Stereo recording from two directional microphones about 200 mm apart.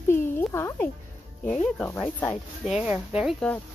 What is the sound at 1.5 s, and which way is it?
Speech, 5° left (ahead or behind).